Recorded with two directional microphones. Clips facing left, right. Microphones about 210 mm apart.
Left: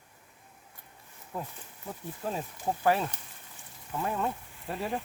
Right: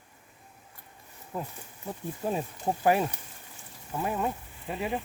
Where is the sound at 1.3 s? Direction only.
5° right (ahead or behind).